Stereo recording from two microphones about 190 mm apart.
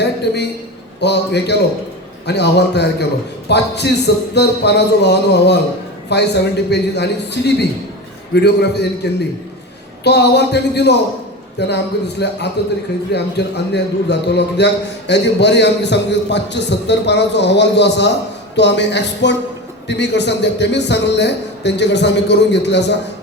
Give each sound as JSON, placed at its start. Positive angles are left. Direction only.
{"t": 0.0, "sound": "a man's voice", "side_deg": 60}
{"t": 10.0, "sound": "a man's voice", "side_deg": 60}